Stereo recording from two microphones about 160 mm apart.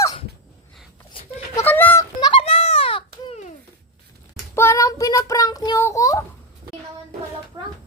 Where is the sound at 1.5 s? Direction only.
10° left (ahead or behind).